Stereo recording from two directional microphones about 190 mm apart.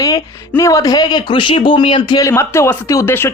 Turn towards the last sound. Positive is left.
turn(degrees=10)  # may be behind; listen again after turning